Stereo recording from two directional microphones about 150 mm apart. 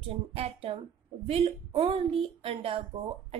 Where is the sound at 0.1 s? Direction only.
40° right (ahead or behind).